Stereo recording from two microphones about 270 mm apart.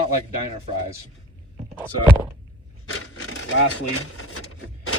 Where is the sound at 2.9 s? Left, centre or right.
Left.